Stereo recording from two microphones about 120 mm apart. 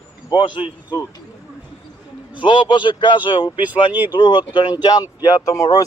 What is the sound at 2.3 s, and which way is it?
Speech, 40° left (ahead or behind).